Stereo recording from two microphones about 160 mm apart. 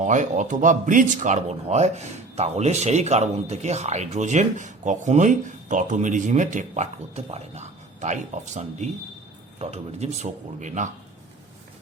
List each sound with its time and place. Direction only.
0.0 s speech: 50° right (ahead or behind)